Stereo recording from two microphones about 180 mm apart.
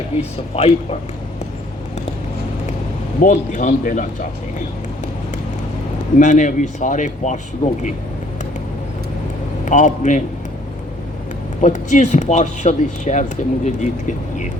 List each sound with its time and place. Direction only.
0.2 s speech: 35° left (ahead or behind)
3.2 s speech: 45° left (ahead or behind)
6.1 s speech: 45° left (ahead or behind)
9.6 s speech: 45° left (ahead or behind)
11.6 s speech: 45° left (ahead or behind)